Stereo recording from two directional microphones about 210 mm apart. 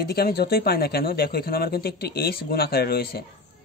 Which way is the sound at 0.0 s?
50° left (ahead or behind).